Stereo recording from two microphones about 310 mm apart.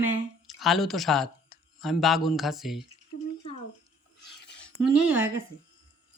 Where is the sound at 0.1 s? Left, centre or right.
Centre.